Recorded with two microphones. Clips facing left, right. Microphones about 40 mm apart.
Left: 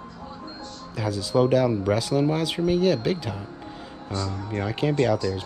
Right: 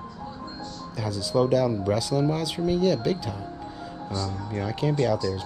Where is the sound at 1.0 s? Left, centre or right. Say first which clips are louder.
Left 2 dB; left.